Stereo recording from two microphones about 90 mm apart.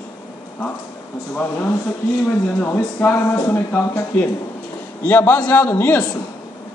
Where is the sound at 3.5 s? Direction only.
25° left (ahead or behind).